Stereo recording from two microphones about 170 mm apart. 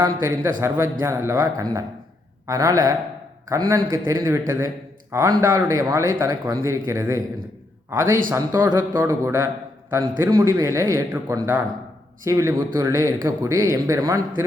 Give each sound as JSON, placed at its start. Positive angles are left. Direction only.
{"t": 0.0, "sound": "speech", "side_deg": -15}